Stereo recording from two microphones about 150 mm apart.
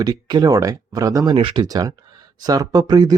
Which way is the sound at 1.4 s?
35° right (ahead or behind).